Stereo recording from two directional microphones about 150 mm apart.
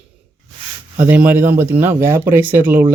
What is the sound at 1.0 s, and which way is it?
Speech, 10° right (ahead or behind).